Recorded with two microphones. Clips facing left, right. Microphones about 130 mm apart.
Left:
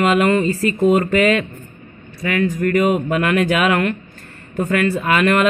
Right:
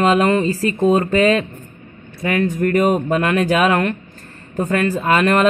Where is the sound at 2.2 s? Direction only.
50° right (ahead or behind).